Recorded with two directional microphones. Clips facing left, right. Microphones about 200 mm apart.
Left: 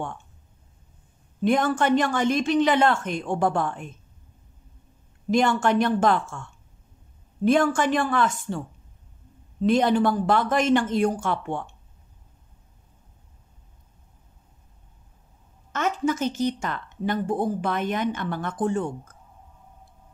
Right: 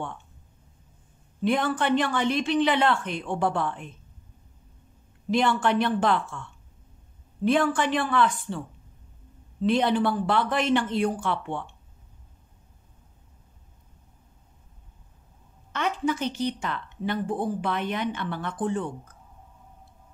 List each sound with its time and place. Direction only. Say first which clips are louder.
1.4 s speech: left 3 dB; 45° left (ahead or behind)
5.3 s speech: left 2 dB; 45° left (ahead or behind)
15.7 s speech: left 2 dB; 45° left (ahead or behind)